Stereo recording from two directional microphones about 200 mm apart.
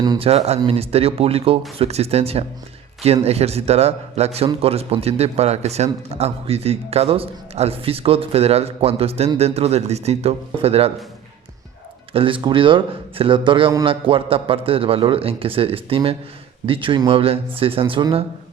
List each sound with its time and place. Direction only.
0.0 s a man's voice: 25° right (ahead or behind)
12.1 s a man's voice: 25° right (ahead or behind)